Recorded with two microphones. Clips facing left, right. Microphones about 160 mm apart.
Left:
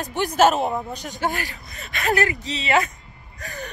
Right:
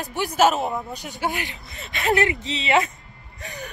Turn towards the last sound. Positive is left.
turn(degrees=-20)  # may be behind; listen again after turning